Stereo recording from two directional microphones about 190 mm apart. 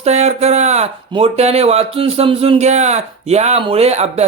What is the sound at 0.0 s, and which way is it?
Speech, 35° right (ahead or behind).